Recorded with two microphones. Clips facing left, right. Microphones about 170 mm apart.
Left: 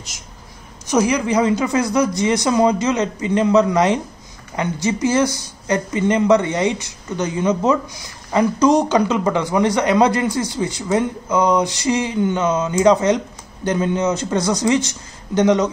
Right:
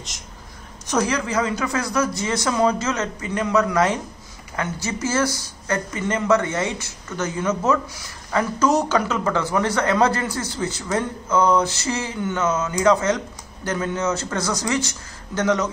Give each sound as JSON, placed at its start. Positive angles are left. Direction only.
{"t": 0.8, "sound": "speech", "side_deg": 10}